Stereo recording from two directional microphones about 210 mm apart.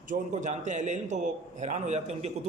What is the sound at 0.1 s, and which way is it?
A man's voice, 35° right (ahead or behind).